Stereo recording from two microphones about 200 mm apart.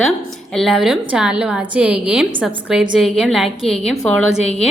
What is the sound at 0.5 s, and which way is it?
A woman's voice, centre (ahead or behind).